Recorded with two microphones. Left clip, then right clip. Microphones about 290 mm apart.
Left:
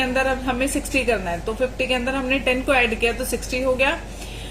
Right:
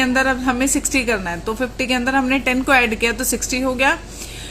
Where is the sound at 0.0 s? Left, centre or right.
Right.